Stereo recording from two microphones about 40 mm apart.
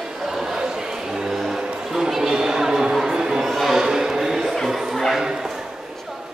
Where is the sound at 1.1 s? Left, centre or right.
Centre.